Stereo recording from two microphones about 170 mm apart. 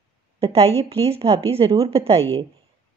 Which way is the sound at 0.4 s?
35° right (ahead or behind).